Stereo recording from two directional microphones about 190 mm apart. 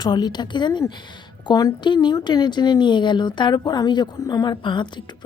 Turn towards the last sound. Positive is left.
turn(degrees=25)  # may be behind; listen again after turning